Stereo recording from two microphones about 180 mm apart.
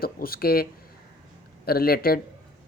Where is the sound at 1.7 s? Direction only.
55° left (ahead or behind).